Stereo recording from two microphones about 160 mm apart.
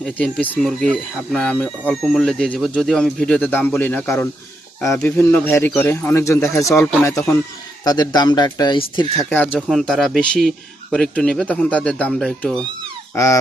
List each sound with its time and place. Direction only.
0.0 s speech: 5° left (ahead or behind); by 9.2 s 30° left (ahead or behind)
9.3 s speech: 10° left (ahead or behind)